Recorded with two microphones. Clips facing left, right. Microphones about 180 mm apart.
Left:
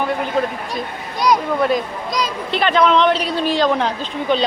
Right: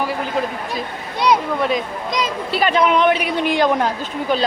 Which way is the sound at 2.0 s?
25° right (ahead or behind).